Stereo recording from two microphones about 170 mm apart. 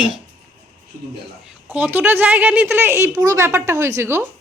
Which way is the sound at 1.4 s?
10° right (ahead or behind).